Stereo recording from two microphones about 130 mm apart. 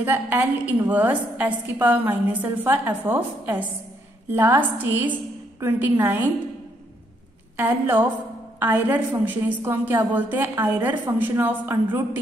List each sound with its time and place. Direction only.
0.0 s a woman's voice: 15° right (ahead or behind)
7.5 s a woman's voice: 15° right (ahead or behind)